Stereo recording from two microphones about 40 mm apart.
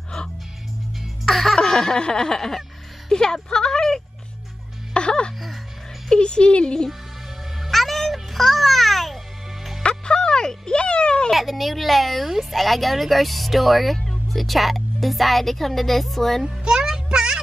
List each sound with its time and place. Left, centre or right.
1.2 s music: centre
1.6 s a sound: centre
3.1 s speech: centre
4.9 s music: left
6.0 s a sound: left
7.6 s music: centre
9.8 s music: left
11.3 s a woman's voice: centre
16.4 s a child's voice: centre